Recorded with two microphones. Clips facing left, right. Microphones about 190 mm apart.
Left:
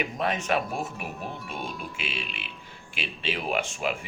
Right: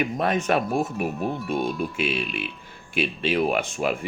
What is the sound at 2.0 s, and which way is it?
Speech, 55° right (ahead or behind).